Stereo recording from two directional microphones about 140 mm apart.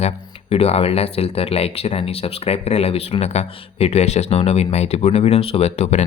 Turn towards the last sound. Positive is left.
turn(degrees=50)  # may be behind; listen again after turning